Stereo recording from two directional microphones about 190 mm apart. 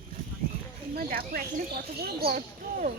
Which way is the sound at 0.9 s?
50° right (ahead or behind).